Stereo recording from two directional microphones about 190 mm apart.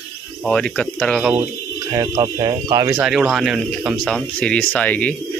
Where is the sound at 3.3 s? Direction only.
Centre (ahead or behind).